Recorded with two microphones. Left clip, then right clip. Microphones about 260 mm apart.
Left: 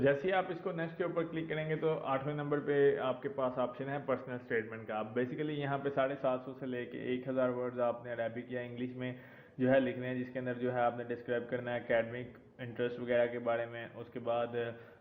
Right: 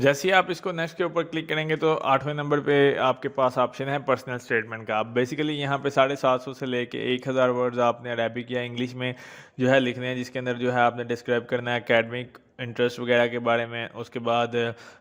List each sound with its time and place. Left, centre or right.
0.0 s a man's voice: right